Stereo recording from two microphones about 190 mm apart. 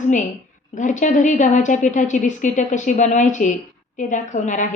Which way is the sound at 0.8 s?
40° left (ahead or behind).